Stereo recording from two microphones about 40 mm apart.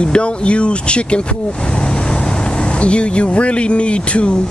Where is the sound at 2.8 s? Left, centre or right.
Left.